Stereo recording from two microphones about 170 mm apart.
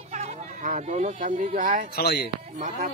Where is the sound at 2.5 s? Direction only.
50° right (ahead or behind).